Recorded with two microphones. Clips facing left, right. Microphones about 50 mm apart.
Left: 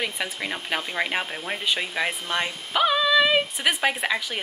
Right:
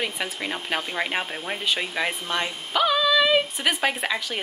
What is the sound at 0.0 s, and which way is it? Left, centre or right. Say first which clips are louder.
Speech: even; centre.